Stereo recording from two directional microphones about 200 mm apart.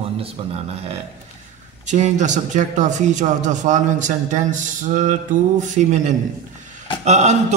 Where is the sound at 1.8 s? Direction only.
35° right (ahead or behind).